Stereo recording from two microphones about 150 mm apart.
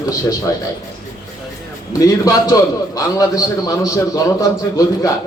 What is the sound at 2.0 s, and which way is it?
A man's voice, 25° left (ahead or behind).